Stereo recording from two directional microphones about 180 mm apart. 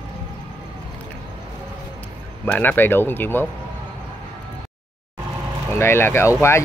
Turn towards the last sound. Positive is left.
turn(degrees=15)  # may be behind; listen again after turning